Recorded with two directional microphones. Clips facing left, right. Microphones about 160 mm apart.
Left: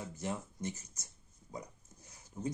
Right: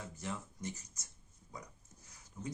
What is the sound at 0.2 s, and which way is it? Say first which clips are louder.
Speech: left 4 dB; 25° left (ahead or behind).